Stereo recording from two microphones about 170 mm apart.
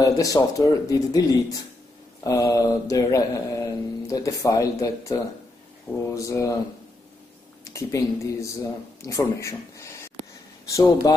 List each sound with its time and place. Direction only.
0.0 s speech: 20° left (ahead or behind)
7.7 s speech: 20° left (ahead or behind)